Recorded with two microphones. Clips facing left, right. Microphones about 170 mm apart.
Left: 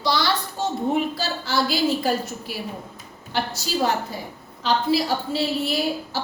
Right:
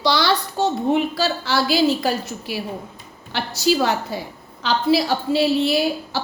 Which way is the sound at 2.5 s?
80° right.